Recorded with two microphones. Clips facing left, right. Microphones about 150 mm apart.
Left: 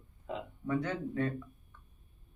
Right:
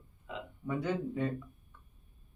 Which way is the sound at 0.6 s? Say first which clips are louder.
Even; 10° right (ahead or behind).